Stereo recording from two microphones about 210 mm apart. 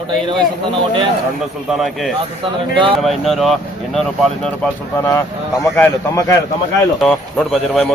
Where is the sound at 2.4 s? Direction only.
25° right (ahead or behind).